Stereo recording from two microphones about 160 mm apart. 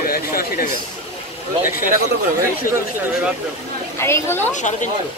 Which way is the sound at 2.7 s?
60° left (ahead or behind).